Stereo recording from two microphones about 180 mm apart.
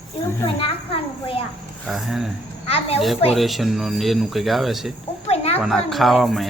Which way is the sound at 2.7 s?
35° left (ahead or behind).